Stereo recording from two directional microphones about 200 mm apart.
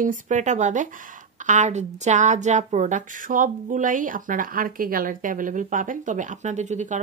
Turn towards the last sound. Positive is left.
turn(degrees=-35)  # may be behind; listen again after turning